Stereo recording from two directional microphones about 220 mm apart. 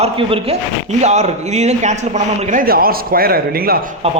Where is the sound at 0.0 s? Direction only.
25° right (ahead or behind); by 3.8 s 45° right (ahead or behind).